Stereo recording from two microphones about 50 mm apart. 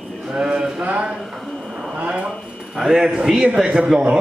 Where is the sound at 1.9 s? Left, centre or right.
Right.